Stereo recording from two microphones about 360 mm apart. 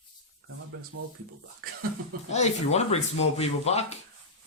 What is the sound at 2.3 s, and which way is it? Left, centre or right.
Speech, centre.